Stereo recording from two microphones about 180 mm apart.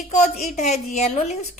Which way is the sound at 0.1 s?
40° left (ahead or behind).